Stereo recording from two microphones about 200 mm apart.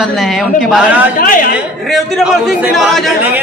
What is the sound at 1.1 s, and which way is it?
Speech, 45° left (ahead or behind).